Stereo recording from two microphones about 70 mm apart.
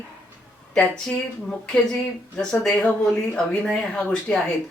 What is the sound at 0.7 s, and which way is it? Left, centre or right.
Speech, centre.